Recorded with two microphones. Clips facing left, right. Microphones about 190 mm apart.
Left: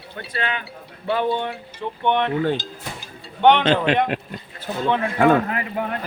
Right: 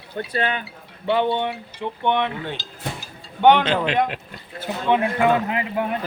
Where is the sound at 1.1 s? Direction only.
20° right (ahead or behind).